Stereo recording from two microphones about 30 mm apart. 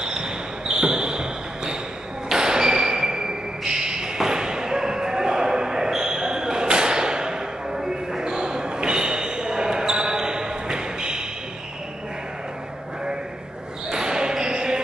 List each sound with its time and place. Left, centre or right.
0.0 s basketball bounce: right
2.3 s a sound: right
4.2 s slam: right
8.2 s basketball bounce: right
13.8 s basketball bounce: right